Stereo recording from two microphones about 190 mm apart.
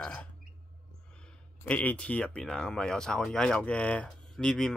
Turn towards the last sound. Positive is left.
turn(degrees=5)  # may be behind; listen again after turning